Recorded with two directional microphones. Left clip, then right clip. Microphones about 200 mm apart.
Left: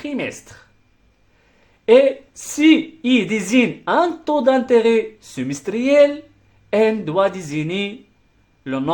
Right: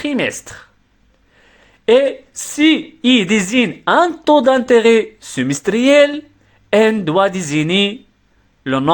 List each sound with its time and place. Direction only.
0.0 s speech: 25° right (ahead or behind)
1.8 s a man's voice: 25° right (ahead or behind)